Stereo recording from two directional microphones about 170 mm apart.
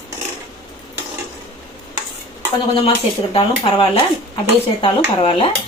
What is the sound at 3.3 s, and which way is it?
Speech, 30° left (ahead or behind).